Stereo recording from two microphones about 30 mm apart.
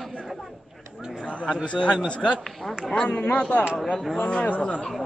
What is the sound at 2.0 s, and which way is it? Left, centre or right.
A man's voice, left.